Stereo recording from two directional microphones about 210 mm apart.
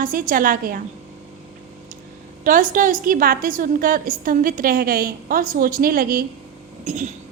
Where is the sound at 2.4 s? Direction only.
40° right (ahead or behind).